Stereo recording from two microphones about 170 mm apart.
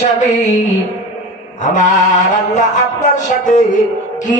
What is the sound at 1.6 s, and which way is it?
A man's voice, 45° left (ahead or behind).